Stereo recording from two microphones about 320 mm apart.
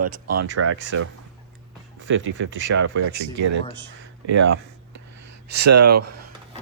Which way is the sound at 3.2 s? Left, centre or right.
Right.